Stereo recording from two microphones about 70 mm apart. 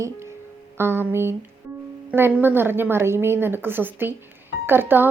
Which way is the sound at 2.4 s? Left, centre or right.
Right.